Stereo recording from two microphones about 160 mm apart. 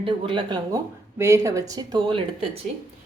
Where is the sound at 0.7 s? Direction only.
20° right (ahead or behind).